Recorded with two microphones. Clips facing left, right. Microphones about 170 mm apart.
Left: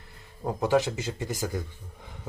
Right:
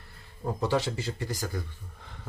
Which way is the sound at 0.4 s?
15° left (ahead or behind).